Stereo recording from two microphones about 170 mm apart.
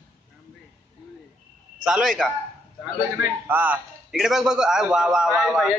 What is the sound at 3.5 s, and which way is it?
A man's voice, 10° right (ahead or behind).